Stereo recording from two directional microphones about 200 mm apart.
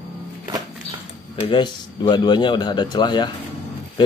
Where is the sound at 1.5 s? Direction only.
25° left (ahead or behind).